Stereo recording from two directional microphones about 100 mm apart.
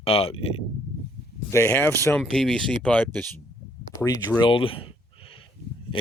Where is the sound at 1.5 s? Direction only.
25° left (ahead or behind).